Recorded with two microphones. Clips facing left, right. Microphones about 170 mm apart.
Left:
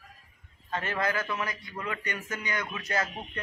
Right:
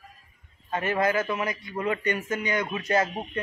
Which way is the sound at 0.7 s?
15° right (ahead or behind).